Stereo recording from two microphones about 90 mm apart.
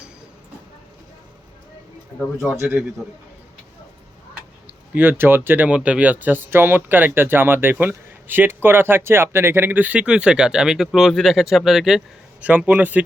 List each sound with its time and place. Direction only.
2.6 s speech: 20° right (ahead or behind)
4.6 s speech: 20° right (ahead or behind); by 12.0 s 5° right (ahead or behind)
12.4 s a man's voice: 15° right (ahead or behind)